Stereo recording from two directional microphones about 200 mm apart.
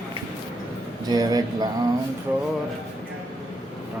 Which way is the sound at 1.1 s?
20° right (ahead or behind).